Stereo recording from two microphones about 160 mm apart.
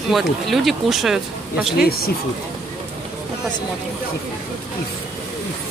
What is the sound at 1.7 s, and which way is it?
Speech, 70° left (ahead or behind).